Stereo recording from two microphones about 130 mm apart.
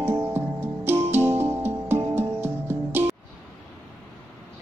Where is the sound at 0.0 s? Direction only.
20° right (ahead or behind).